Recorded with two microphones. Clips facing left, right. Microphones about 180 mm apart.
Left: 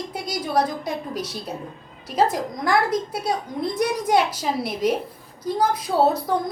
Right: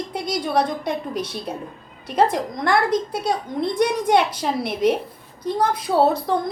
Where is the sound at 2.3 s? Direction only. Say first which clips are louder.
Right 1 dB; 5° left (ahead or behind).